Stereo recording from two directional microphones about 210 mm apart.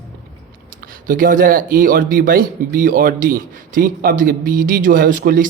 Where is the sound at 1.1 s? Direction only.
40° right (ahead or behind).